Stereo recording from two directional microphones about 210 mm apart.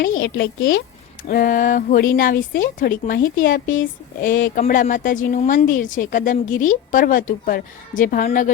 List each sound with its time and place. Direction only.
0.1 s speech: 50° left (ahead or behind)
1.3 s a woman's voice: 40° left (ahead or behind)